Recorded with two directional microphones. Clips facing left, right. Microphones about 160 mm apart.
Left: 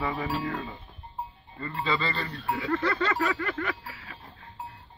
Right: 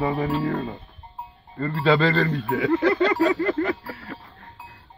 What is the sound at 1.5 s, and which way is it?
Speech, 65° right (ahead or behind).